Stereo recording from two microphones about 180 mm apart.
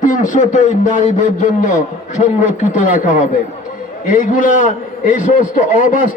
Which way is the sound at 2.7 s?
45° left (ahead or behind).